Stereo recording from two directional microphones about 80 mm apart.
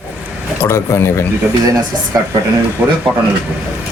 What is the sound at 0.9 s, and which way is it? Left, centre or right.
Speech, left.